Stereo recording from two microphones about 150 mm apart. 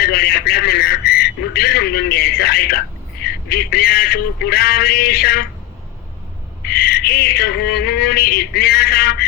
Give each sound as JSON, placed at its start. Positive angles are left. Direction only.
{"t": 0.0, "sound": "a man's voice", "side_deg": 90}
{"t": 6.7, "sound": "bird", "side_deg": 90}